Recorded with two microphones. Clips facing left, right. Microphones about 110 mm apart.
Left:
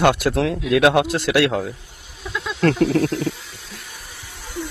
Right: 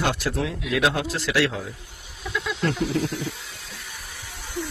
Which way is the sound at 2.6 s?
85° left.